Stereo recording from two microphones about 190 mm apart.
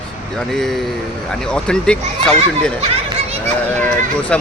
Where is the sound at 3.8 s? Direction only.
10° left (ahead or behind).